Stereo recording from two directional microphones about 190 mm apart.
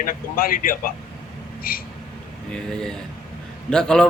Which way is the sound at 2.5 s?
5° left (ahead or behind).